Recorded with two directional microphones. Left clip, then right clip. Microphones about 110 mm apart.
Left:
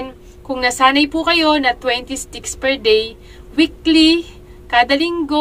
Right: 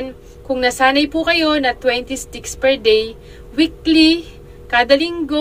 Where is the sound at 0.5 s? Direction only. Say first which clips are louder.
Left 1 dB; 35° left (ahead or behind).